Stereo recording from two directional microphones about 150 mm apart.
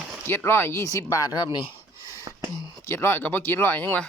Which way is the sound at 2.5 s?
25° left (ahead or behind).